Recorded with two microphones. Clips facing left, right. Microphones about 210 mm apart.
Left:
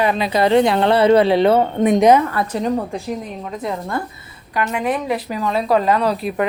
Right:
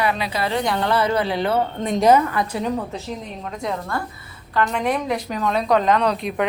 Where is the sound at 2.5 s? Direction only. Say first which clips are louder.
Left 6 dB; 40° left (ahead or behind).